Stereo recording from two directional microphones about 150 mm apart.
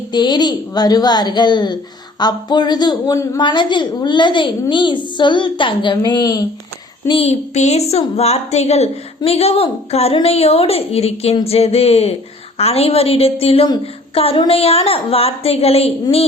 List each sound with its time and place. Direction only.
0.1 s a woman's voice: 30° left (ahead or behind)
7.1 s a woman's voice: 40° left (ahead or behind)